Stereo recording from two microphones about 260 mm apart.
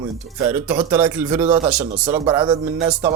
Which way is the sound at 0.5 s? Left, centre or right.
Centre.